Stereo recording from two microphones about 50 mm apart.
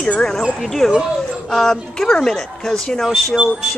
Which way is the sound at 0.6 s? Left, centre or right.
Centre.